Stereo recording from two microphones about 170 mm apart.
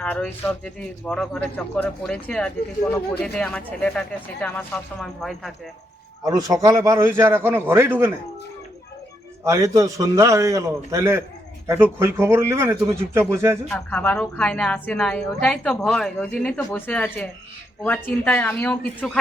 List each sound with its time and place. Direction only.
0.0 s a woman's voice: 10° left (ahead or behind)
6.2 s a man's voice: 20° right (ahead or behind)
9.4 s a man's voice: 15° right (ahead or behind)
13.7 s a woman's voice: 10° left (ahead or behind)